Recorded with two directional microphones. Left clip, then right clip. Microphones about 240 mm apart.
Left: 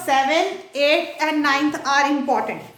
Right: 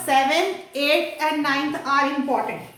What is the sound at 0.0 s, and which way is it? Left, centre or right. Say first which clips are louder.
A woman's voice: left 1 dB; centre.